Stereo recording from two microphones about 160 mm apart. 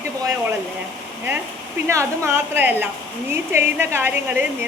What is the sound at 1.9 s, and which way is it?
A woman's voice, 15° right (ahead or behind).